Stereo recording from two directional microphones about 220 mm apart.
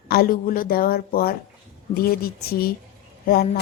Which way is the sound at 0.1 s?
40° left (ahead or behind).